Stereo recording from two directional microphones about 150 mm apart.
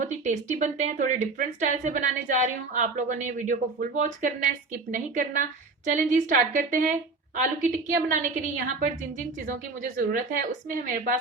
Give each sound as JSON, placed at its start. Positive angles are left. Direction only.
{"t": 0.0, "sound": "a woman's voice", "side_deg": -55}
{"t": 10.7, "sound": "a woman's voice", "side_deg": -65}